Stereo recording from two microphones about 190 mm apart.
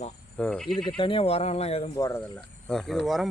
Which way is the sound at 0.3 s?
5° left (ahead or behind).